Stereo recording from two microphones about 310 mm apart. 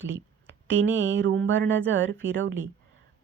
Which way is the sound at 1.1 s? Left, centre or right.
Right.